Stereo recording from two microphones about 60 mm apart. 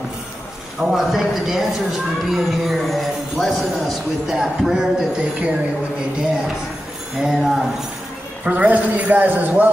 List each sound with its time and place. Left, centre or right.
0.7 s speech: centre
7.2 s mantra: centre
8.5 s speech: right